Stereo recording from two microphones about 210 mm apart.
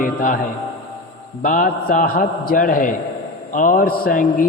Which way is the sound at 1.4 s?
40° left (ahead or behind).